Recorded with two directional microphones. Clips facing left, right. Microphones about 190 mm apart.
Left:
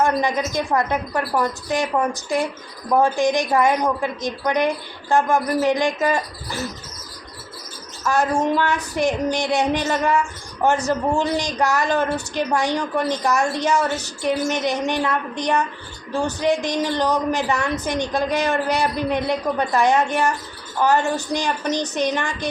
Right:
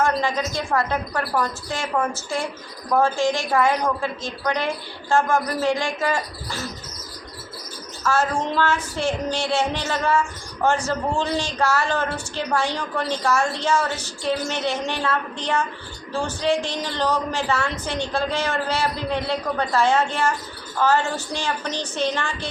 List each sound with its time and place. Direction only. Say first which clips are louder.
0.0 s a woman's voice: left 2 dB; 15° left (ahead or behind)
8.0 s a woman's voice: left 3 dB; 15° left (ahead or behind)